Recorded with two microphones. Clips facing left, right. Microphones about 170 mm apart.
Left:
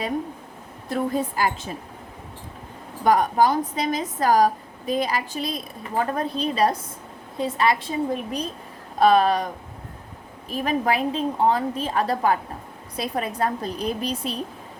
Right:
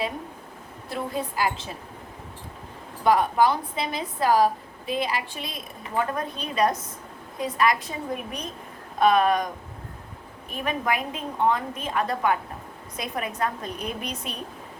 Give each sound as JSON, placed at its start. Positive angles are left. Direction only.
{"t": 0.9, "sound": "a woman's voice", "side_deg": 45}
{"t": 3.0, "sound": "a woman's voice", "side_deg": 45}
{"t": 10.5, "sound": "a woman's voice", "side_deg": 35}